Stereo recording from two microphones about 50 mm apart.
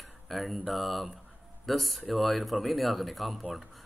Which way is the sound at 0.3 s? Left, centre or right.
Centre.